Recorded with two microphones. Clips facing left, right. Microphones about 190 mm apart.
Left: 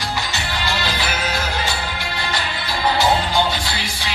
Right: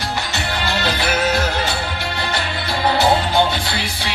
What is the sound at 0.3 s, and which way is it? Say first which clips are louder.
Music: right 2 dB; 60° right (ahead or behind).